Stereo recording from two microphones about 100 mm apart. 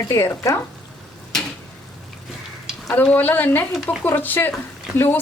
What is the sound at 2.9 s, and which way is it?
A woman's voice, 15° left (ahead or behind).